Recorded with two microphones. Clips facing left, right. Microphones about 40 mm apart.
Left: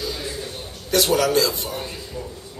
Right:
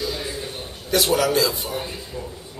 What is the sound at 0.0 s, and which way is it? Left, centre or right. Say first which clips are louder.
A man's voice: right 1 dB; centre.